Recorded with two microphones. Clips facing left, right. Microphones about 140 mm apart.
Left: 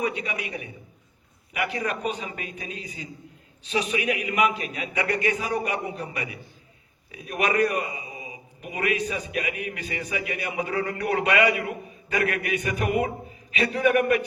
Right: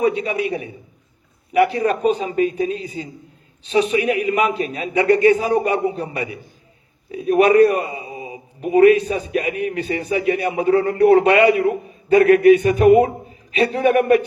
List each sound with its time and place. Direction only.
0.0 s a man's voice: 35° right (ahead or behind)